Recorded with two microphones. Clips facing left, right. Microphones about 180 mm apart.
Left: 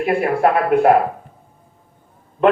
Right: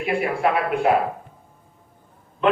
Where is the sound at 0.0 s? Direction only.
50° left (ahead or behind).